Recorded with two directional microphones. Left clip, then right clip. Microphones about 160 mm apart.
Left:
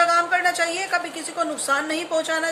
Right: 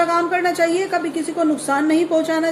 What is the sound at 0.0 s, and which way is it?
A woman's voice, 25° left (ahead or behind).